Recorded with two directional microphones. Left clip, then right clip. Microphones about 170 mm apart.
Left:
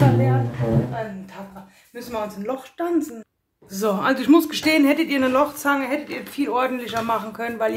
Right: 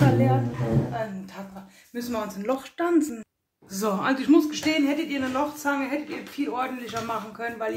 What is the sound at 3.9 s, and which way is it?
Speech, 15° left (ahead or behind).